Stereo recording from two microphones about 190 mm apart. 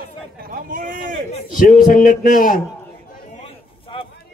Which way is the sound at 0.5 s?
45° right (ahead or behind).